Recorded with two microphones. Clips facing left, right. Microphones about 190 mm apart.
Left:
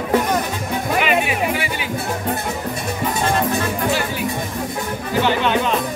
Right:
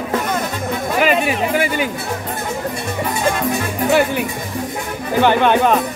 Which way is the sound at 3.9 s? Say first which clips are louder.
Right 6 dB; 60° right (ahead or behind).